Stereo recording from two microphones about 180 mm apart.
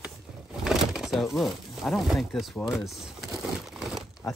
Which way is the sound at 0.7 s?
Centre (ahead or behind).